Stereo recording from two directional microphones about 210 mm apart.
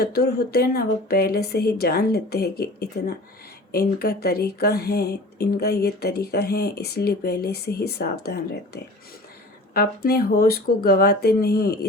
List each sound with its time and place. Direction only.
0.0 s speech: 50° left (ahead or behind)